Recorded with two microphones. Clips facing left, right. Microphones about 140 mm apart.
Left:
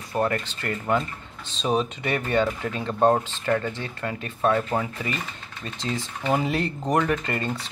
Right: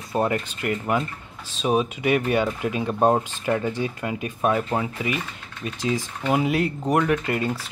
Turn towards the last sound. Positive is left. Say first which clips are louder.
# right 3 dB
turn(degrees=-5)  # may be behind; listen again after turning